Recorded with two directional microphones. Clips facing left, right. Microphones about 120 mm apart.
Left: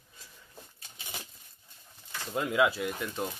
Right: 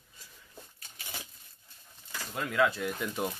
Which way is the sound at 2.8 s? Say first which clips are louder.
Right 1 dB; centre (ahead or behind).